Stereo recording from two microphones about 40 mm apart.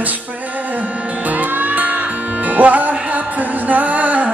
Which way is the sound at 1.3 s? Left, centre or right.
Right.